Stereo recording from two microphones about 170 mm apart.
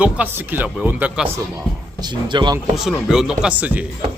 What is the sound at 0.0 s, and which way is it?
Speech, 10° right (ahead or behind).